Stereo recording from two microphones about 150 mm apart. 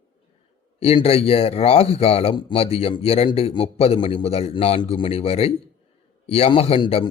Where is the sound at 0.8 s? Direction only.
40° left (ahead or behind).